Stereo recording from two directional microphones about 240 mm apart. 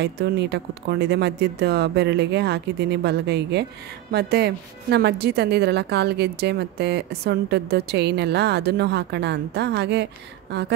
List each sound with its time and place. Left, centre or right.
0.0 s speech: right